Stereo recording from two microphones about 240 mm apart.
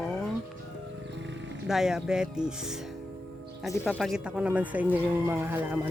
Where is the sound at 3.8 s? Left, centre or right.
Centre.